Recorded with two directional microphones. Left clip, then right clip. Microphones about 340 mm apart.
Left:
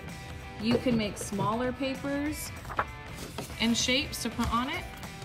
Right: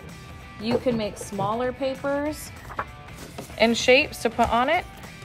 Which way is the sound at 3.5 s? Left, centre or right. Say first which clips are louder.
Right 10 dB; right.